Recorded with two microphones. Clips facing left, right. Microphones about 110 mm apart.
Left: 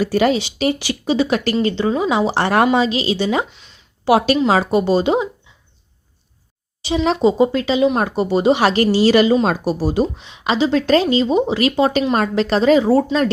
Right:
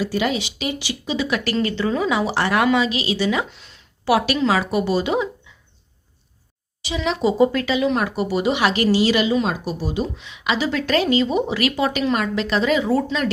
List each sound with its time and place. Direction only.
0.0 s speech: 45° left (ahead or behind); by 3.4 s 30° left (ahead or behind)
3.5 s a sound: centre (ahead or behind)
4.0 s speech: 30° left (ahead or behind)
6.8 s speech: 40° left (ahead or behind)
7.2 s speech: 25° left (ahead or behind)